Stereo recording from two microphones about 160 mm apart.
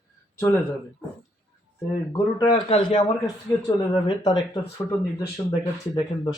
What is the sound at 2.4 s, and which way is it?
A man's voice, 35° left (ahead or behind).